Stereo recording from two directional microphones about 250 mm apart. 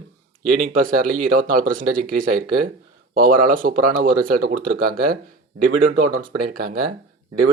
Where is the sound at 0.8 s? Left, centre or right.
Right.